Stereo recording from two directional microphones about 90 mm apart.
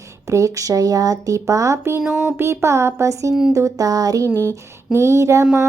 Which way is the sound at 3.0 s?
35° right (ahead or behind).